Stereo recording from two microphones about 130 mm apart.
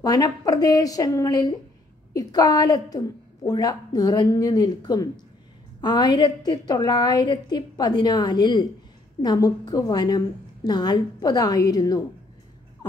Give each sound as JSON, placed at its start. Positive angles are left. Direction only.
{"t": 0.0, "sound": "a woman's voice", "side_deg": 30}